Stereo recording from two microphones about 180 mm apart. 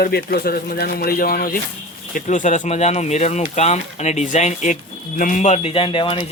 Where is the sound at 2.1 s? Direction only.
45° left (ahead or behind).